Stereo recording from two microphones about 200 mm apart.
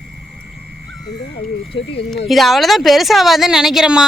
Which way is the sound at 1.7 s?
25° left (ahead or behind).